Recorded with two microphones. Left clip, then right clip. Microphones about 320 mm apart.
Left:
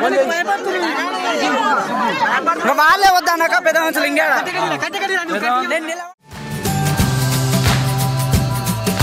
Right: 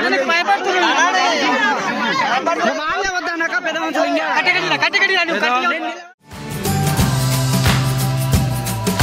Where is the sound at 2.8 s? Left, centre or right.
Centre.